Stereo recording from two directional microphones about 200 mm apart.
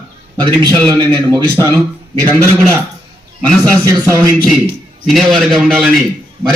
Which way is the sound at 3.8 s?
15° right (ahead or behind).